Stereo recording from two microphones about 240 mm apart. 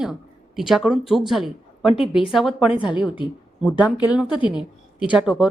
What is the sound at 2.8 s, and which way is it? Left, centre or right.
Speech, centre.